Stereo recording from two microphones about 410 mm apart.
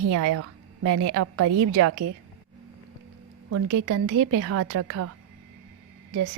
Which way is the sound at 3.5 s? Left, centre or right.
Right.